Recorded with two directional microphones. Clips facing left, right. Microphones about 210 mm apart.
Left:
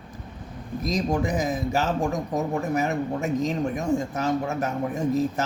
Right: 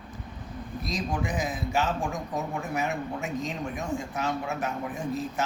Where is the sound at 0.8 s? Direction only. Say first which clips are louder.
Left 7 dB; 40° left (ahead or behind).